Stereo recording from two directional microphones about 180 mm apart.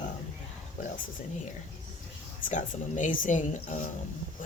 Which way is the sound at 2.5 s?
45° left (ahead or behind).